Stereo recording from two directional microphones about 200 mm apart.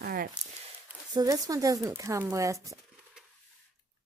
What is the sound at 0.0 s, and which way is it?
Speech, 50° right (ahead or behind).